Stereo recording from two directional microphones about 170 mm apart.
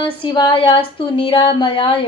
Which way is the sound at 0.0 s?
30° left (ahead or behind).